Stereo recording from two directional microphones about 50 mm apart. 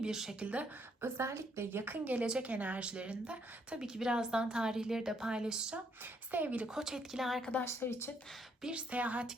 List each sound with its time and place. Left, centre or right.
0.0 s a woman's voice: centre
0.3 s a woman's voice: right
1.0 s a woman's voice: right
1.8 s a woman's voice: right
2.2 s a woman's voice: right
3.8 s a woman's voice: centre
6.3 s a woman's voice: right
6.7 s a woman's voice: centre
7.6 s speech: left
8.6 s a woman's voice: right